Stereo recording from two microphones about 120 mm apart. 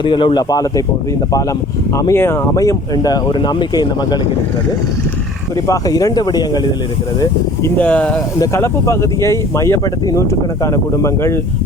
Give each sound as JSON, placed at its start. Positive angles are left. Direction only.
{"t": 0.0, "sound": "speech", "side_deg": 45}
{"t": 2.0, "sound": "speech", "side_deg": 25}
{"t": 5.6, "sound": "speech", "side_deg": 30}
{"t": 7.8, "sound": "speech", "side_deg": 10}
{"t": 8.4, "sound": "speech", "side_deg": 25}